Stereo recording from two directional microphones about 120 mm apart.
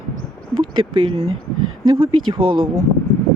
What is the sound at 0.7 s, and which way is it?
Speech, 45° right (ahead or behind).